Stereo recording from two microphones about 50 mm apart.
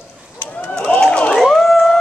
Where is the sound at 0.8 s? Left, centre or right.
Centre.